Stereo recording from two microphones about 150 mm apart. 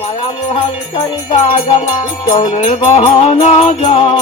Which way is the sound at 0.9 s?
35° left (ahead or behind).